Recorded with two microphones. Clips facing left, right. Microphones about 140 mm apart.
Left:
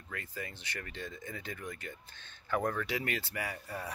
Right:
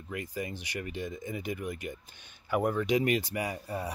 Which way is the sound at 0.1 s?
15° right (ahead or behind).